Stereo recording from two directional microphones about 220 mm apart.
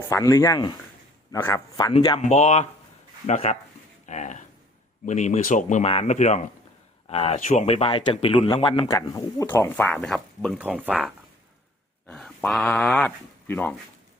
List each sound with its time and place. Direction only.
0.1 s speech: 15° left (ahead or behind); by 3.6 s 30° left (ahead or behind)
4.0 s a sound: 35° left (ahead or behind)
5.0 s speech: 30° left (ahead or behind); by 11.1 s 5° right (ahead or behind)
12.0 s speech: 5° left (ahead or behind)